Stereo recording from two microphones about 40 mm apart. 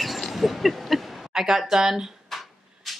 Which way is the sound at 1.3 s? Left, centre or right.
Centre.